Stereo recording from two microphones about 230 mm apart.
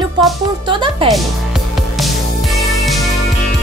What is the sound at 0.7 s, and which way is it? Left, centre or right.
Speech, right.